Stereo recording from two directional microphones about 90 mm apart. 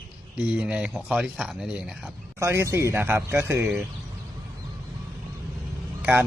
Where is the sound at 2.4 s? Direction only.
30° right (ahead or behind).